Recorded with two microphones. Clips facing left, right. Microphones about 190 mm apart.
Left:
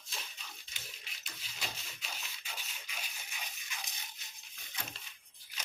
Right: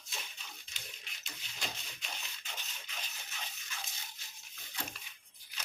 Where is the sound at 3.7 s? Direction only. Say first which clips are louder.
Even; 15° left (ahead or behind).